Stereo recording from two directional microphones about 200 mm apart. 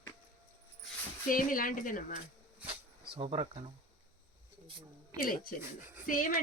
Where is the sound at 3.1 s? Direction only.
30° right (ahead or behind).